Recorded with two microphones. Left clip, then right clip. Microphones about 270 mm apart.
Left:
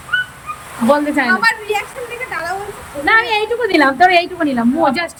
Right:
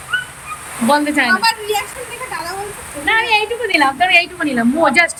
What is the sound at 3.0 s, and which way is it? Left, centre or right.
Speech, centre.